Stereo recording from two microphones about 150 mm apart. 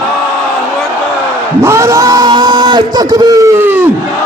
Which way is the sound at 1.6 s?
20° right (ahead or behind).